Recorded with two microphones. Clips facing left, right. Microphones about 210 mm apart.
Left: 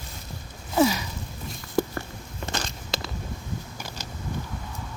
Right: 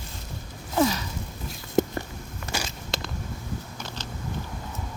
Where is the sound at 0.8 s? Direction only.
10° left (ahead or behind).